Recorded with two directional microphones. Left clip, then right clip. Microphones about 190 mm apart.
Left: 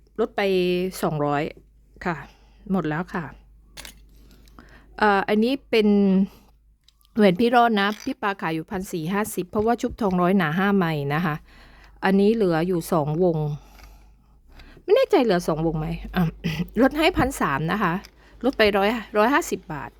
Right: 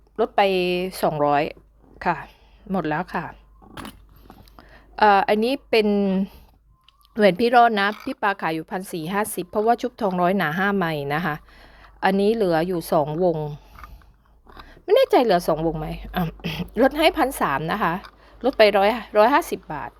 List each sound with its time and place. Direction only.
0.2 s a woman's voice: 30° left (ahead or behind)
4.5 s a woman's voice: 35° left (ahead or behind)
14.7 s a woman's voice: 35° left (ahead or behind)